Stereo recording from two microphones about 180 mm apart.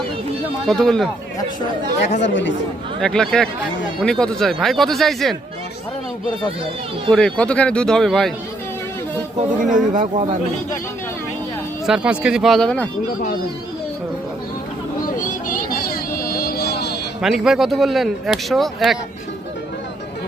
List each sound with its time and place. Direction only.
0.6 s speech: 5° left (ahead or behind)
2.0 s speech: 40° left (ahead or behind)
2.2 s speech: 90° left
3.0 s speech: 5° left (ahead or behind)
7.1 s speech: 5° left (ahead or behind)
9.7 s speech: 45° right (ahead or behind)
11.9 s speech: 5° right (ahead or behind)
15.0 s vehicle: 50° left (ahead or behind); by 17.0 s 65° left (ahead or behind)
17.2 s speech: centre (ahead or behind)